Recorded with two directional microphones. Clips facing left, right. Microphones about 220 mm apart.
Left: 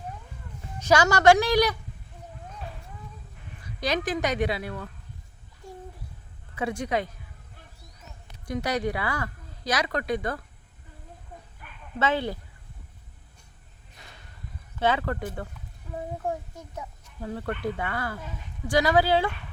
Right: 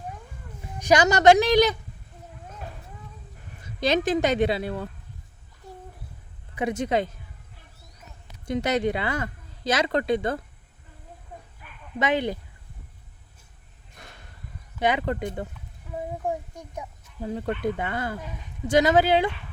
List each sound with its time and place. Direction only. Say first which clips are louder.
0.8 s speech: right 2 dB; 15° right (ahead or behind)
3.6 s speech: right 5 dB; 25° right (ahead or behind)
6.6 s speech: right 3 dB; 20° right (ahead or behind)
8.4 s speech: right 4 dB; 25° right (ahead or behind)
11.9 s speech: right 2 dB; 15° right (ahead or behind)
14.8 s speech: right 1 dB; 15° right (ahead or behind)